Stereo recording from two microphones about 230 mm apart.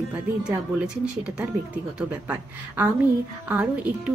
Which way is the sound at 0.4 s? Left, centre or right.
Centre.